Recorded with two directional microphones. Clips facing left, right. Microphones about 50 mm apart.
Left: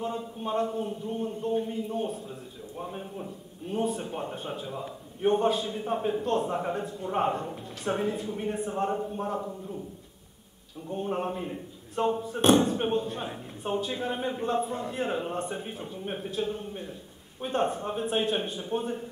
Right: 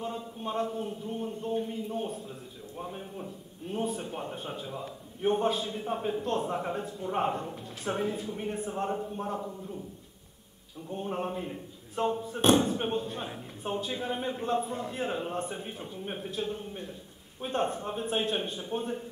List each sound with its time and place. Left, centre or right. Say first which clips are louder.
0.0 s a man's voice: left 3 dB; centre
10.9 s a man's voice: left 3 dB; centre